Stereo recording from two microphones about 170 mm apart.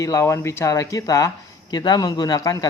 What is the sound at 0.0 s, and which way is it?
Speech, 20° left (ahead or behind).